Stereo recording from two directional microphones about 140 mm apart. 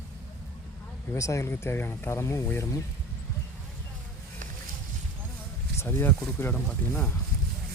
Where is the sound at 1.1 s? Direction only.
20° left (ahead or behind).